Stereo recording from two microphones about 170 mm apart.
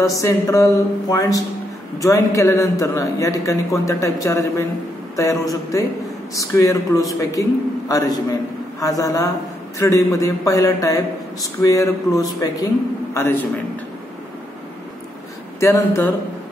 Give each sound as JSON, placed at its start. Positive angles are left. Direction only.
{"t": 0.0, "sound": "a man's voice", "side_deg": 20}
{"t": 15.6, "sound": "speech", "side_deg": 15}